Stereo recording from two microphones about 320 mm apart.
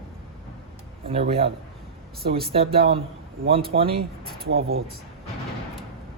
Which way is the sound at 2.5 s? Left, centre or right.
Centre.